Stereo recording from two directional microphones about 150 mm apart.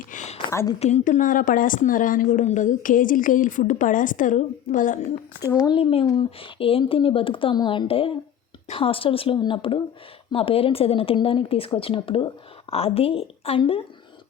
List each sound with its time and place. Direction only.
0.1 s a sound: 55° left (ahead or behind)
0.8 s a woman's voice: 50° left (ahead or behind); by 2.2 s 65° left (ahead or behind)
2.3 s a woman's voice: 50° left (ahead or behind)
5.4 s speech: 25° left (ahead or behind)
5.7 s speech: 40° left (ahead or behind)